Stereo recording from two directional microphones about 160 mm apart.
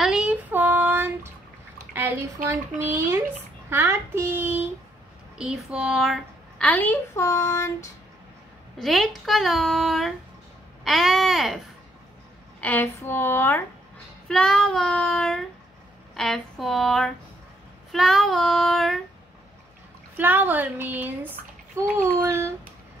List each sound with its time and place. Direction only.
0.0 s child singing: 5° right (ahead or behind)
2.0 s speech: 15° right (ahead or behind)
6.6 s a woman's voice: 10° left (ahead or behind)
8.7 s speech: centre (ahead or behind)
12.5 s a woman's voice: 10° left (ahead or behind)
20.2 s speech: 10° right (ahead or behind)